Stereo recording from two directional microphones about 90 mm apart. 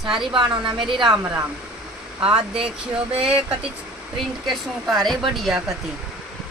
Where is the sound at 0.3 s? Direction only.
55° right (ahead or behind).